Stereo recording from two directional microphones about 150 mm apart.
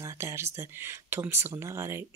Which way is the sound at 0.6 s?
15° right (ahead or behind).